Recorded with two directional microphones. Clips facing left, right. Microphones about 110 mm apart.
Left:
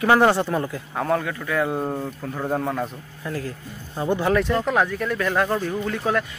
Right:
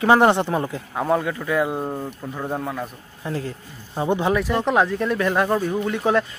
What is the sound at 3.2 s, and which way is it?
Speech, 25° right (ahead or behind).